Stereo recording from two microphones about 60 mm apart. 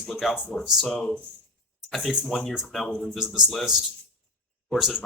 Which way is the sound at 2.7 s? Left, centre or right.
Centre.